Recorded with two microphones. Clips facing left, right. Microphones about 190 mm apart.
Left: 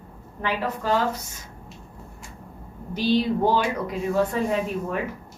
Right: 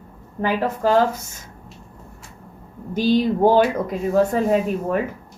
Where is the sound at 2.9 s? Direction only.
45° right (ahead or behind).